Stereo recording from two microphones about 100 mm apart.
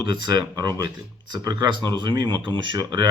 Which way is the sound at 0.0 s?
45° right (ahead or behind).